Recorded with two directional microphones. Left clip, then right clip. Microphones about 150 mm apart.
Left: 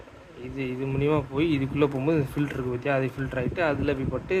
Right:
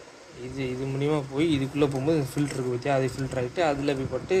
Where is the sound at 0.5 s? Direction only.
15° left (ahead or behind).